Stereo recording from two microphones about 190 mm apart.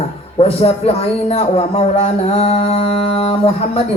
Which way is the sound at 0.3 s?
30° left (ahead or behind).